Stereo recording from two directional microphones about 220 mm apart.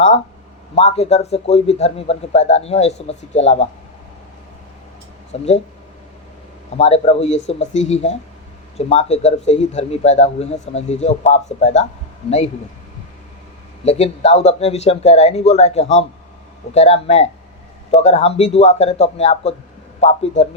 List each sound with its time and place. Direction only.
0.8 s a man's voice: 30° left (ahead or behind)
5.3 s a man's voice: 30° left (ahead or behind)
6.7 s a man's voice: 30° left (ahead or behind)
13.8 s a man's voice: 30° left (ahead or behind)